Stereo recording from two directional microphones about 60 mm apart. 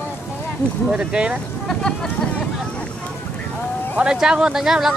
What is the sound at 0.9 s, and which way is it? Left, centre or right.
Speech, centre.